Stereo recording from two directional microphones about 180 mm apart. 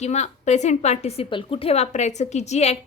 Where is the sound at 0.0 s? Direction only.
40° left (ahead or behind).